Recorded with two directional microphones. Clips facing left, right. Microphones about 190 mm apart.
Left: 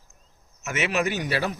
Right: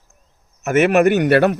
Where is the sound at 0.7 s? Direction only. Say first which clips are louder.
Right 12 dB; 55° right (ahead or behind).